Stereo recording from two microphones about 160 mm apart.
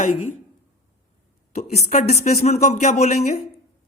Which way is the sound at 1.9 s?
45° left (ahead or behind).